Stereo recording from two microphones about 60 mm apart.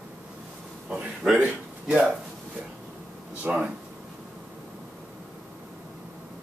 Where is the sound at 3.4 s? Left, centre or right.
Right.